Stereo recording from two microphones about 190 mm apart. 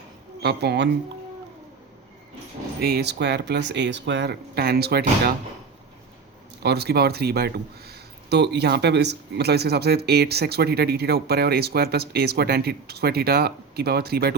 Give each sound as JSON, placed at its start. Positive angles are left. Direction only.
{"t": 0.4, "sound": "speech", "side_deg": -60}
{"t": 2.8, "sound": "speech", "side_deg": -60}
{"t": 6.6, "sound": "speech", "side_deg": -60}